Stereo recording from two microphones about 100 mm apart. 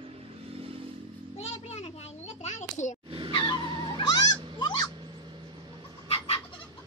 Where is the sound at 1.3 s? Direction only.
90° left.